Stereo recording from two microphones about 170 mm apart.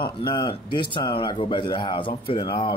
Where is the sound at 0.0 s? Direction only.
25° left (ahead or behind).